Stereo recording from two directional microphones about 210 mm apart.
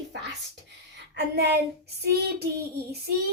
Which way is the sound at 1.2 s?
50° right (ahead or behind).